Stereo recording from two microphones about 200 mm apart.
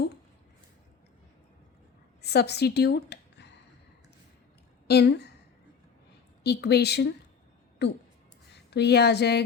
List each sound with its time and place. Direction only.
2.2 s a woman's voice: 55° left (ahead or behind)
4.9 s a woman's voice: 55° left (ahead or behind)
6.4 s a woman's voice: 55° left (ahead or behind)